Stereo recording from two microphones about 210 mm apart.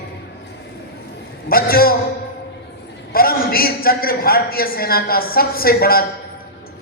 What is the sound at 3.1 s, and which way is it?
A man's voice, 45° left (ahead or behind).